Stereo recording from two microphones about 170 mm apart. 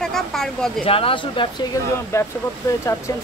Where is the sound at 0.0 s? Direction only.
Centre (ahead or behind).